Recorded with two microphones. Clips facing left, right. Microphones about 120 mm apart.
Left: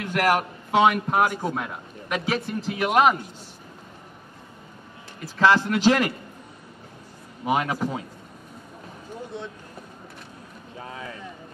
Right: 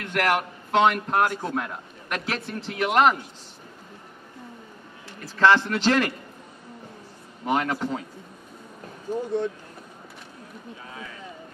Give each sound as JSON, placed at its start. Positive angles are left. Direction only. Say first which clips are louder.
{"t": 0.0, "sound": "a man's voice", "louder": "left 2 dB", "side_deg": 5}
{"t": 5.4, "sound": "speech", "louder": "left 1 dB", "side_deg": 10}
{"t": 7.4, "sound": "speech", "louder": "left 1 dB", "side_deg": 5}